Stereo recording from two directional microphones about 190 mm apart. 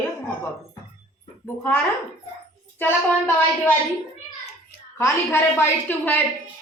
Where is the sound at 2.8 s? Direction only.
10° left (ahead or behind).